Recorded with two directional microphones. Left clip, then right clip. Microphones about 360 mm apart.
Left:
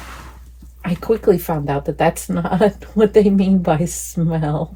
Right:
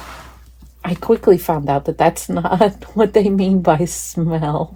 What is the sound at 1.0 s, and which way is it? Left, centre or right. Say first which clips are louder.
Speech: right 3 dB; right.